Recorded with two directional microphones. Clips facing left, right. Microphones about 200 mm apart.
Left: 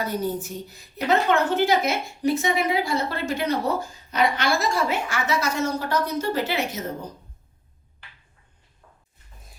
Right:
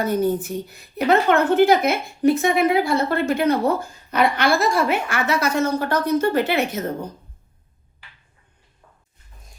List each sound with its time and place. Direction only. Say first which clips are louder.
0.0 s a woman's voice: right 6 dB; 55° right (ahead or behind)